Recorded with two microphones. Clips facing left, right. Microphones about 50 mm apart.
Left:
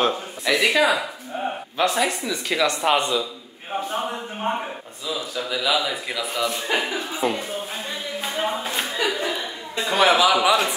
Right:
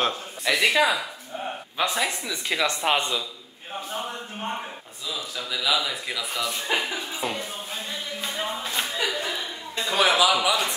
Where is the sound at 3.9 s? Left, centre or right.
Left.